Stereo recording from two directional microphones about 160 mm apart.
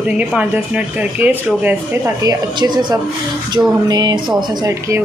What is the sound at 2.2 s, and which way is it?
A woman's voice, 25° right (ahead or behind).